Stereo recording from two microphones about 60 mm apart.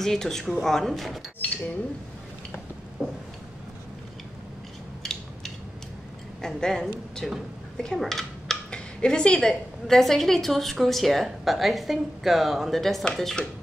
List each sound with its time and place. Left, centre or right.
0.0 s speech: centre
3.0 s a sound: centre
5.0 s mechanisms: centre
6.4 s a child's voice: centre